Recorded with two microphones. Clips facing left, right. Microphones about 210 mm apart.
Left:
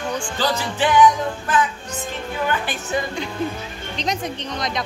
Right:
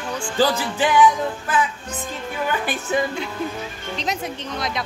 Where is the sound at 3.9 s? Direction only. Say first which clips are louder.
Left 2 dB; 5° right (ahead or behind).